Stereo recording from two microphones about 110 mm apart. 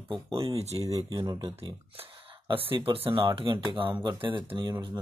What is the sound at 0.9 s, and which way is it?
Speech, 35° right (ahead or behind).